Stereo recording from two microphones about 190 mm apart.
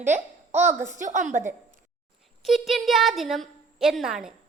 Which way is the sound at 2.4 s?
Centre (ahead or behind).